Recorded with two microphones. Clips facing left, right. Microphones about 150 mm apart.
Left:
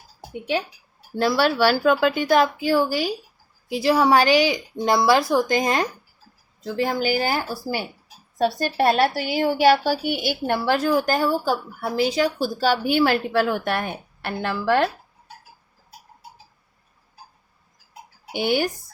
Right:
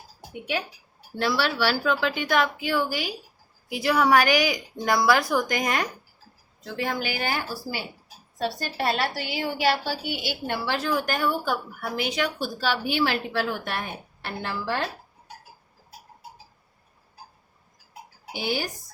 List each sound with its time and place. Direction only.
1.2 s a woman's voice: 40° left (ahead or behind); by 14.8 s 65° left (ahead or behind)
18.3 s speech: 65° left (ahead or behind)